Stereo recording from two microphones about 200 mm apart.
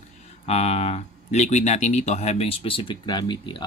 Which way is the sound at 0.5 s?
30° left (ahead or behind).